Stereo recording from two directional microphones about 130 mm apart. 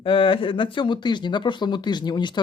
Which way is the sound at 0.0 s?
40° left (ahead or behind).